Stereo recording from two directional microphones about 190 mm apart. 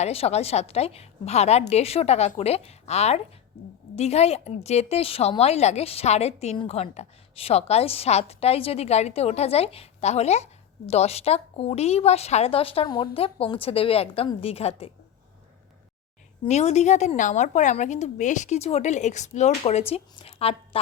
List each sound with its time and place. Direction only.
0.0 s a woman's voice: 30° left (ahead or behind)
16.4 s a woman's voice: 35° left (ahead or behind)